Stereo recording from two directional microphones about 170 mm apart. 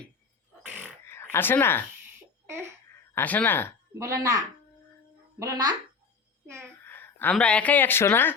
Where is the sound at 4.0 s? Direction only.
20° right (ahead or behind).